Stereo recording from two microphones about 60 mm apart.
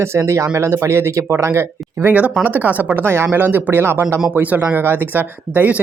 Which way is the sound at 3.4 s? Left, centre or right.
Right.